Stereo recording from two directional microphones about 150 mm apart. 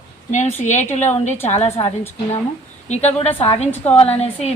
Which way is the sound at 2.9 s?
45° left (ahead or behind).